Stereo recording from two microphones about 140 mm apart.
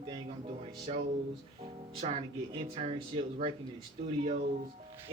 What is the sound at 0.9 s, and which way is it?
Speech, 45° right (ahead or behind).